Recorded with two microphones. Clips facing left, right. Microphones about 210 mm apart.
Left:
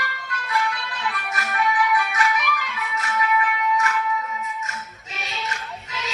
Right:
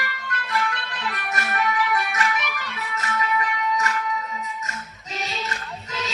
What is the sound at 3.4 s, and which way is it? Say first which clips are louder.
Music: left 2 dB; 40° right (ahead or behind).